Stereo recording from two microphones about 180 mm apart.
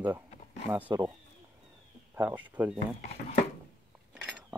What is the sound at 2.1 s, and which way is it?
Speech, 10° right (ahead or behind).